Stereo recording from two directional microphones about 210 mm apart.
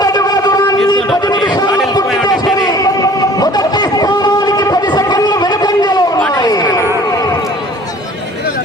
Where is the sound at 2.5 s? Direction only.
20° left (ahead or behind).